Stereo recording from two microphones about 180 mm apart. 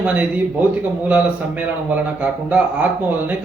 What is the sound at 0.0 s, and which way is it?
A man's voice, 10° right (ahead or behind).